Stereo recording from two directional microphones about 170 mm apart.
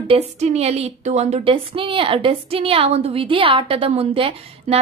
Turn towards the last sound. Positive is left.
turn(degrees=-40)  # may be behind; listen again after turning